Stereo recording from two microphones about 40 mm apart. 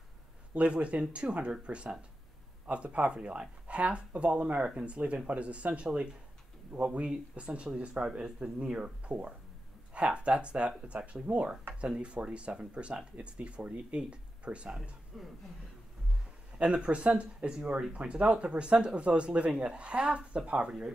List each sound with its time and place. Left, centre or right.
0.6 s speech: right
15.1 s speech: centre
16.5 s speech: right